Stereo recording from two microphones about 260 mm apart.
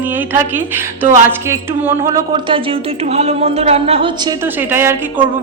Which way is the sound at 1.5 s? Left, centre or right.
Centre.